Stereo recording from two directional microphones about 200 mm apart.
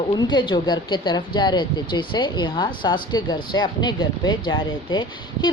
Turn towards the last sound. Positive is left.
turn(degrees=20)  # may be behind; listen again after turning